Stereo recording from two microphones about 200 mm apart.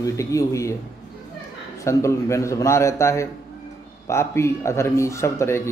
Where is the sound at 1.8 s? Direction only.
15° left (ahead or behind).